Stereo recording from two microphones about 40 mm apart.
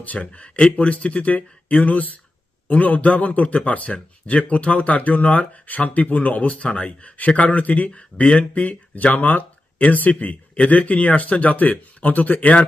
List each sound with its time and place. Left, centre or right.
0.2 s a man's voice: left
7.9 s a man's voice: left